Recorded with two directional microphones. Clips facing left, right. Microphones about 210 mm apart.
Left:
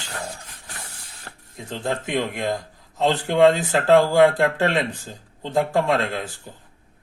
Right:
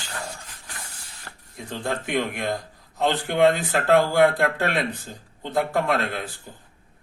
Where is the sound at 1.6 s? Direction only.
20° left (ahead or behind).